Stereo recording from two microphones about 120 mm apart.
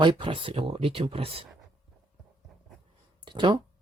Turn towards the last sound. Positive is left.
turn(degrees=-40)  # may be behind; listen again after turning